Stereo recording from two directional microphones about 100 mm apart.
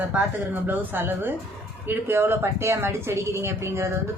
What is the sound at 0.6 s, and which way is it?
A woman's voice, 20° right (ahead or behind).